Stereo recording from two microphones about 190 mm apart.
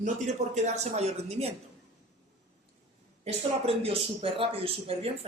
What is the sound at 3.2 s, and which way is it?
Speech, 30° right (ahead or behind).